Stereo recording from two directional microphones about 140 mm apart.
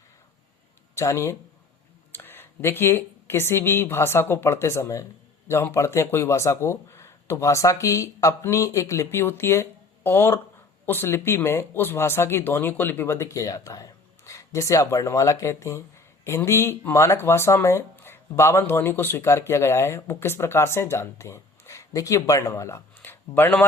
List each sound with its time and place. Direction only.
0.9 s speech: 20° left (ahead or behind)